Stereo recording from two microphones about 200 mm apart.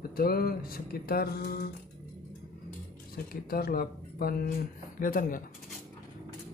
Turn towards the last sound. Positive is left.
turn(degrees=45)  # may be behind; listen again after turning